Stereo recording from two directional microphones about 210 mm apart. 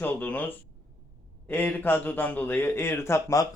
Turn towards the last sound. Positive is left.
turn(degrees=15)  # may be behind; listen again after turning